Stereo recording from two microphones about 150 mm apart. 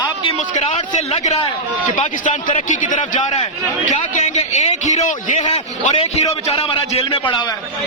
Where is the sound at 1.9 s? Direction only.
55° left (ahead or behind); by 7.4 s 35° left (ahead or behind).